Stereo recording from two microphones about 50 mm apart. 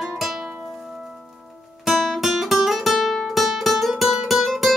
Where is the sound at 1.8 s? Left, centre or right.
Centre.